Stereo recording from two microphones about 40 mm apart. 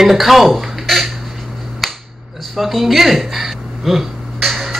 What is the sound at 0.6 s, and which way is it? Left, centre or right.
Squawk, centre.